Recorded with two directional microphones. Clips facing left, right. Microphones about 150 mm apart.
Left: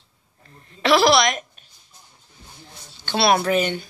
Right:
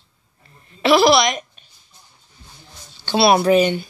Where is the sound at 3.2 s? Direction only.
20° right (ahead or behind).